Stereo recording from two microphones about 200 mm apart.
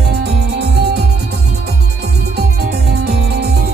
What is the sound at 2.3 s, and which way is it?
Music, 55° right (ahead or behind).